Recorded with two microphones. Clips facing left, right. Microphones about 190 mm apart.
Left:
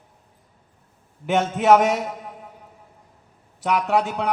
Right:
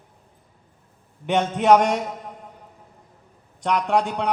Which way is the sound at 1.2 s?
5° left (ahead or behind).